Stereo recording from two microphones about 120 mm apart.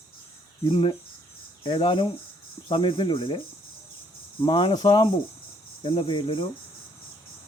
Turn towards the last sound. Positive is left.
turn(degrees=45)  # may be behind; listen again after turning